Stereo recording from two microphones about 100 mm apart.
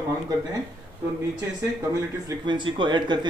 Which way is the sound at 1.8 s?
30° right (ahead or behind).